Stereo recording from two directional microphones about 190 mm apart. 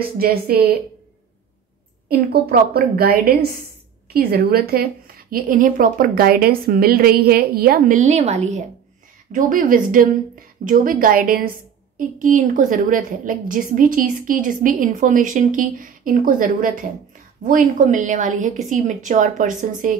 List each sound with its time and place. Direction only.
0.2 s a woman's voice: 55° right (ahead or behind)
2.0 s a woman's voice: 55° right (ahead or behind)